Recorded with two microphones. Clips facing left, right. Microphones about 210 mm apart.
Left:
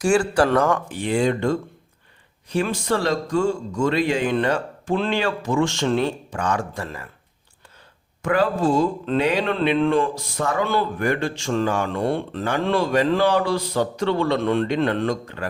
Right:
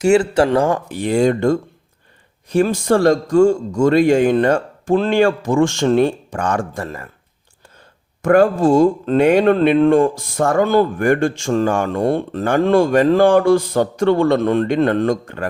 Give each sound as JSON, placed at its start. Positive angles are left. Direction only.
{"t": 0.0, "sound": "speech", "side_deg": -25}
{"t": 8.2, "sound": "speech", "side_deg": -50}